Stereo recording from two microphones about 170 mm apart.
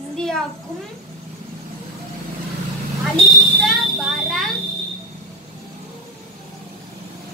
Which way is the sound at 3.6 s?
Centre (ahead or behind).